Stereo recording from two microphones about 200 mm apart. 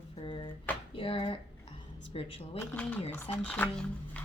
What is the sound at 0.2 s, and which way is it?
Drawer open or close, 25° left (ahead or behind).